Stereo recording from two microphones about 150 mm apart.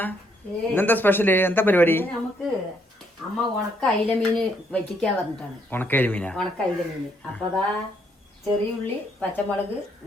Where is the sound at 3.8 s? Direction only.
5° left (ahead or behind).